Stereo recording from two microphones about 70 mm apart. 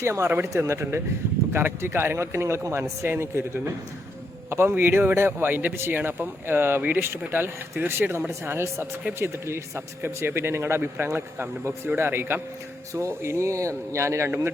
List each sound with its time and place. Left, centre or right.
0.0 s a man's voice: right
12.9 s speech: right